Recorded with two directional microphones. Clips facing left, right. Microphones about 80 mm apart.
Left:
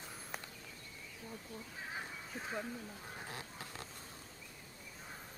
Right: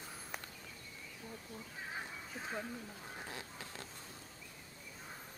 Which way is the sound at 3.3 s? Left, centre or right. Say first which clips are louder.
Even; left.